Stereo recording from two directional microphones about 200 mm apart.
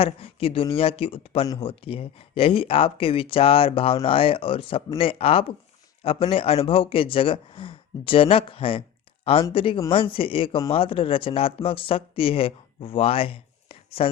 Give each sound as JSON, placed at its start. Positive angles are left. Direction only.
{"t": 0.0, "sound": "speech", "side_deg": 30}